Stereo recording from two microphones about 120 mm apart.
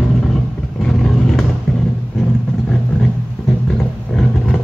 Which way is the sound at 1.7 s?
5° left (ahead or behind).